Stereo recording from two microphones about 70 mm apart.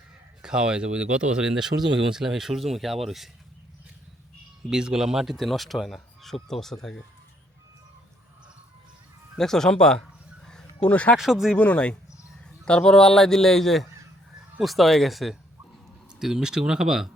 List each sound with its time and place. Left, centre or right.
0.4 s speech: centre
4.7 s speech: centre
9.4 s speech: centre
10.4 s a sound: centre
10.8 s speech: centre
11.2 s speech: centre
11.5 s speech: centre